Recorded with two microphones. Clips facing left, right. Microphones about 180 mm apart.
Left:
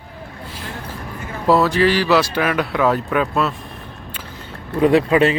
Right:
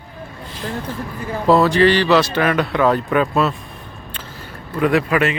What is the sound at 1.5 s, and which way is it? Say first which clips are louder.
Speech: right 2 dB; centre (ahead or behind).